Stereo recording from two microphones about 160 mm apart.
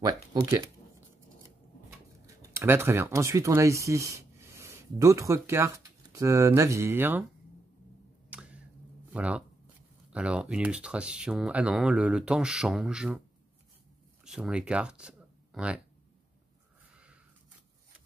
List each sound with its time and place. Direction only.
0.0 s speech: 20° right (ahead or behind)
2.2 s speech: 15° right (ahead or behind)
8.3 s squish: 5° right (ahead or behind)
9.1 s speech: 10° right (ahead or behind)
14.2 s speech: 5° right (ahead or behind)